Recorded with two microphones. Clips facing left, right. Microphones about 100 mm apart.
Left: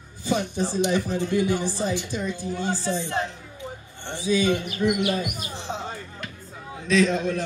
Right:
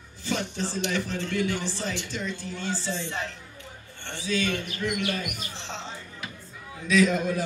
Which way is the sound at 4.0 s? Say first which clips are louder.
Left 6 dB; 15° left (ahead or behind).